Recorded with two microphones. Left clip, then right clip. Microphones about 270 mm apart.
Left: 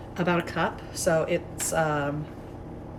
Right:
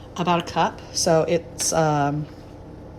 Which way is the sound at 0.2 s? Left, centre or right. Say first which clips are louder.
Right 5 dB; centre.